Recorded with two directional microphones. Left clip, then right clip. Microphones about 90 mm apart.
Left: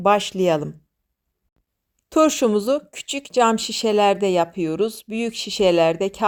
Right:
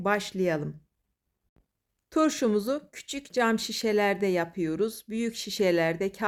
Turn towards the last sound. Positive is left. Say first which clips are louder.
# left 8 dB
turn(degrees=30)  # may be behind; listen again after turning